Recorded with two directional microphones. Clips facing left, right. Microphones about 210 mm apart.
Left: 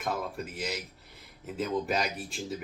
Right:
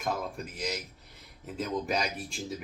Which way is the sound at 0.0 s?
Centre (ahead or behind).